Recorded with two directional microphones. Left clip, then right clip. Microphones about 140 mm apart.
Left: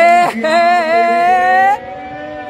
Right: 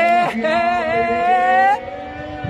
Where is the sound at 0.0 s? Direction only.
35° left (ahead or behind).